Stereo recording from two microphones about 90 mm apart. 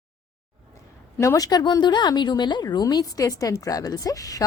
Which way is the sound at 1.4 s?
45° left (ahead or behind).